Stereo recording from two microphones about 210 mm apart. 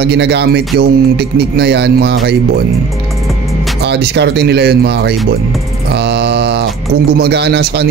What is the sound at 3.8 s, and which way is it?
Speech, 50° right (ahead or behind).